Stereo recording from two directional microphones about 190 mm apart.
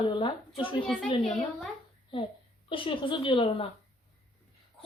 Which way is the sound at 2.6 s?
25° left (ahead or behind).